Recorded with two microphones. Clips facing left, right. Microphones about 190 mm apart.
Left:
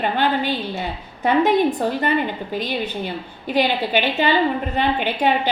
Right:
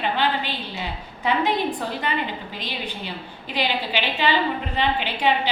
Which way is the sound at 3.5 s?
50° left (ahead or behind).